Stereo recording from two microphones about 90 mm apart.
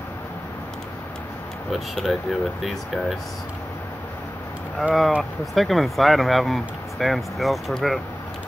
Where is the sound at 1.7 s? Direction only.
Centre (ahead or behind).